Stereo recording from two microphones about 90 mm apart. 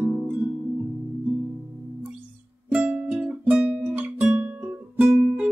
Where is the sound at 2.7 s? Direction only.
15° right (ahead or behind).